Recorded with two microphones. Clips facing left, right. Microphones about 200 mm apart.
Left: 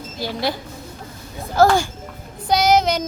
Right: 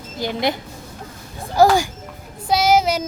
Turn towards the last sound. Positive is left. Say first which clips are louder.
# even
turn(degrees=-5)  # may be behind; listen again after turning